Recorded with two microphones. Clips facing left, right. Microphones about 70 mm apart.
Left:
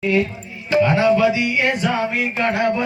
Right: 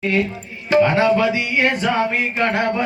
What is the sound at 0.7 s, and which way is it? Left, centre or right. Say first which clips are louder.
Speech: right 1 dB; right.